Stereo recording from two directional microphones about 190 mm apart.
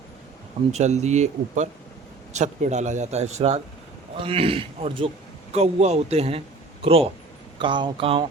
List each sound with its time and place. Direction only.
0.7 s a man's voice: 35° right (ahead or behind)